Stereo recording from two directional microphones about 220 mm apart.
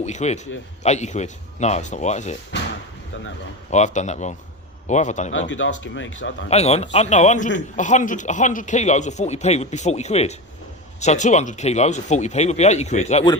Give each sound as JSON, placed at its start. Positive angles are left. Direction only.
{"t": 0.0, "sound": "a man's voice", "side_deg": 30}
{"t": 3.7, "sound": "a man's voice", "side_deg": 30}
{"t": 5.5, "sound": "speech", "side_deg": 60}
{"t": 6.5, "sound": "a man's voice", "side_deg": 30}